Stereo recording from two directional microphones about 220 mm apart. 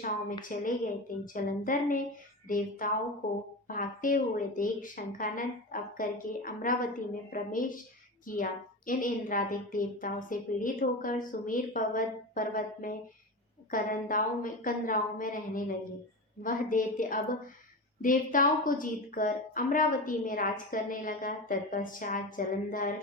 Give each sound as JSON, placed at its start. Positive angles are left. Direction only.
{"t": 0.4, "sound": "a woman's voice", "side_deg": 35}